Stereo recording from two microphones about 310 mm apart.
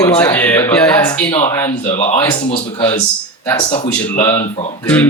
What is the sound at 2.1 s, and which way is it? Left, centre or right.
Speech, centre.